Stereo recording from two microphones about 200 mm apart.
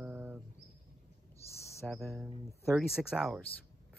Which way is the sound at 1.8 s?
Centre (ahead or behind).